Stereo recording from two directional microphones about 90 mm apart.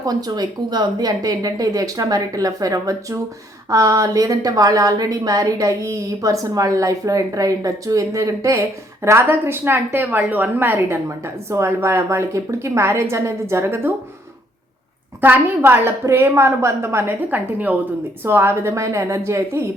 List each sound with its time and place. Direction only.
0.0 s a woman's voice: 45° right (ahead or behind); by 13.9 s 25° right (ahead or behind)
15.2 s a woman's voice: 25° right (ahead or behind)